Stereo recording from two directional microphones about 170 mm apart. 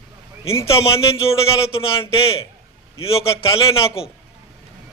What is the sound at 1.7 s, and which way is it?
A man's voice, 35° left (ahead or behind).